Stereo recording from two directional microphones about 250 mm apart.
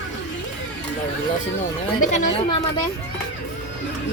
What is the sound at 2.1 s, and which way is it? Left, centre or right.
Speech, left.